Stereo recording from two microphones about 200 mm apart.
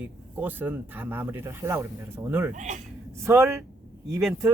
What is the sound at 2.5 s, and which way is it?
Speech, 35° right (ahead or behind).